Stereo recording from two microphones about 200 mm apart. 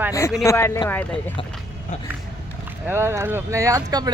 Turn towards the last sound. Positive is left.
turn(degrees=-20)  # may be behind; listen again after turning